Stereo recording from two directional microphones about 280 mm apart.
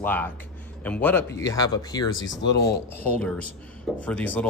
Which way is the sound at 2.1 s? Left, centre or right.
Left.